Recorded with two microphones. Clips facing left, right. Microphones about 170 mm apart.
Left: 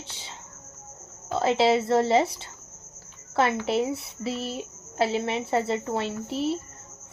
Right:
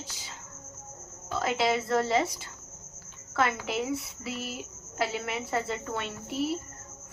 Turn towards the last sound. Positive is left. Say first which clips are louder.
# left 3 dB
turn(degrees=25)  # may be behind; listen again after turning